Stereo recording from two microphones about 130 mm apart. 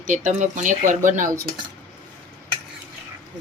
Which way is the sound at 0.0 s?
75° right (ahead or behind).